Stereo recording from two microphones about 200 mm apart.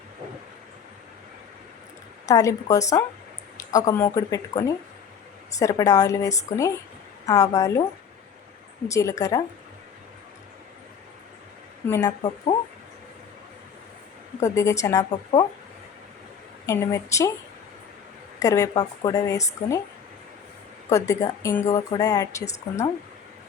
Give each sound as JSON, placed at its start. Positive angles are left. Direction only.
{"t": 2.2, "sound": "a woman's voice", "side_deg": 15}
{"t": 8.9, "sound": "a woman's voice", "side_deg": 15}
{"t": 11.9, "sound": "speech", "side_deg": 20}
{"t": 14.4, "sound": "a woman's voice", "side_deg": 15}
{"t": 16.6, "sound": "a woman's voice", "side_deg": 15}
{"t": 18.3, "sound": "a woman's voice", "side_deg": 15}
{"t": 20.9, "sound": "a woman's voice", "side_deg": 15}